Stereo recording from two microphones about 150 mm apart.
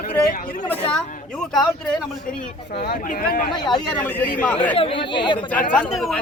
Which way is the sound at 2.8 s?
85° left.